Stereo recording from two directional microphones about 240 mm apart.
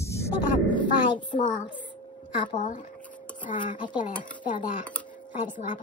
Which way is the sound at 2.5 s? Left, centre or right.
Left.